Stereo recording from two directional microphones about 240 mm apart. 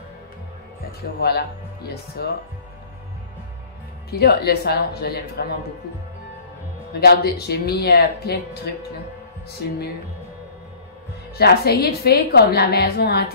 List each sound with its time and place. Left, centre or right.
1.2 s a woman's voice: left
4.1 s a woman's voice: left
6.9 s a woman's voice: left
11.3 s a woman's voice: left